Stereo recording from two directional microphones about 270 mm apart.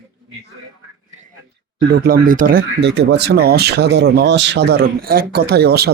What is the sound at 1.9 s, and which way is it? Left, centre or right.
Speech, right.